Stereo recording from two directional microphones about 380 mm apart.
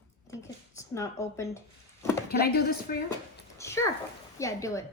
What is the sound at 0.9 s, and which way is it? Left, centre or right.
Speech, centre.